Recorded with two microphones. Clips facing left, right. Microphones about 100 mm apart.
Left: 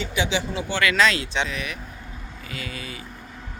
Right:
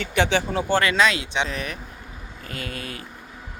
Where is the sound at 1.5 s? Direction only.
40° right (ahead or behind).